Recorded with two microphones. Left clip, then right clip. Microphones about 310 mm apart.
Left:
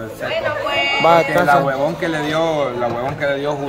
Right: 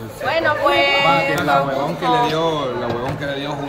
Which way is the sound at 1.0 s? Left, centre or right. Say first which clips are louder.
Left 3 dB; centre.